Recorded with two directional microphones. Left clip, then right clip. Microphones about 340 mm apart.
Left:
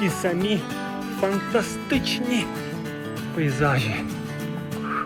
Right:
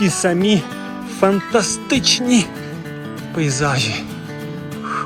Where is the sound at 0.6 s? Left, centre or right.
Centre.